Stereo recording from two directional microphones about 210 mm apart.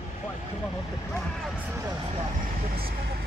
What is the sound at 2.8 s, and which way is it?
Vehicle, 45° right (ahead or behind).